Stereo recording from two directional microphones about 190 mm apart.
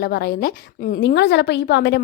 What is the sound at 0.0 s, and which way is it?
A woman's voice, 55° left (ahead or behind).